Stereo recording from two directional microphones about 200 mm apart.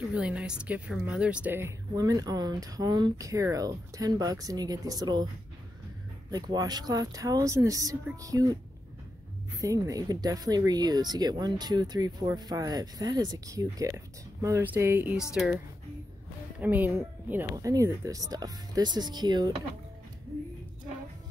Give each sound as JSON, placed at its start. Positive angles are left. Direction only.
{"t": 0.1, "sound": "a woman's voice", "side_deg": -5}
{"t": 6.3, "sound": "speech", "side_deg": -20}
{"t": 9.6, "sound": "a woman's voice", "side_deg": -15}